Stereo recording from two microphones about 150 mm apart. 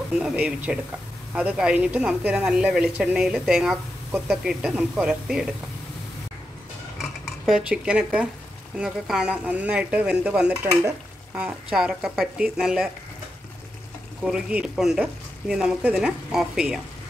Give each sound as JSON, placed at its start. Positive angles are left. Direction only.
{"t": 0.1, "sound": "a woman's voice", "side_deg": -5}
{"t": 7.0, "sound": "dishes", "side_deg": 0}
{"t": 8.7, "sound": "speech", "side_deg": -5}
{"t": 10.5, "sound": "stir", "side_deg": -20}
{"t": 11.3, "sound": "a woman's voice", "side_deg": -5}
{"t": 14.2, "sound": "a woman's voice", "side_deg": -5}